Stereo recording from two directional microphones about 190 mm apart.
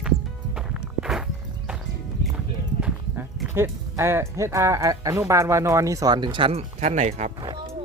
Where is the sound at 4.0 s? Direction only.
15° right (ahead or behind); by 7.3 s 40° right (ahead or behind).